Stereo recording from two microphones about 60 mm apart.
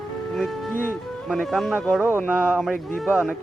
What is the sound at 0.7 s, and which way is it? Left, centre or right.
Speech, left.